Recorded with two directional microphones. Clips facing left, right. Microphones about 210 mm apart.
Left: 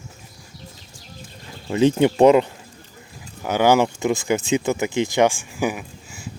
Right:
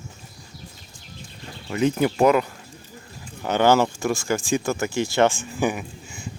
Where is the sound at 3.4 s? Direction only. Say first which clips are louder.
Left 1 dB; 10° left (ahead or behind).